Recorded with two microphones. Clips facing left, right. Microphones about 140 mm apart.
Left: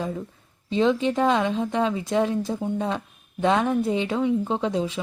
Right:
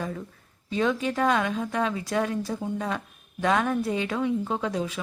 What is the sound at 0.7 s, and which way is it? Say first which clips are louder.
Speech: left 4 dB; 25° left (ahead or behind).